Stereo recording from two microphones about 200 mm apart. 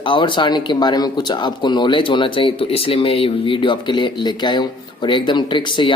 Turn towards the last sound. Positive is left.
turn(degrees=25)  # may be behind; listen again after turning